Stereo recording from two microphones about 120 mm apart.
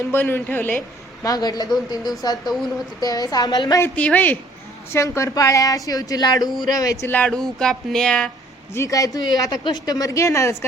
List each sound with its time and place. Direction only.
0.1 s speech: 15° left (ahead or behind)
1.2 s a woman's voice: 30° left (ahead or behind)
3.8 s speech: 10° left (ahead or behind)
4.9 s a woman's voice: 25° left (ahead or behind)
7.2 s a sound: 5° left (ahead or behind)
8.7 s a woman's voice: 25° left (ahead or behind)